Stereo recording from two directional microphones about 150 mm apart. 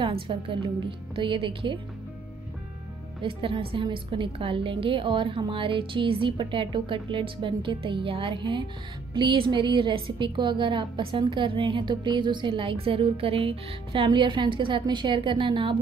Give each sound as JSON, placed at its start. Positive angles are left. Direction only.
{"t": 0.0, "sound": "a woman's voice", "side_deg": -35}
{"t": 3.2, "sound": "a woman's voice", "side_deg": -35}